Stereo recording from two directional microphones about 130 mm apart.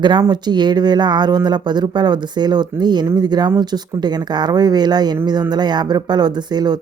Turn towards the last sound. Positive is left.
turn(degrees=-30)  # may be behind; listen again after turning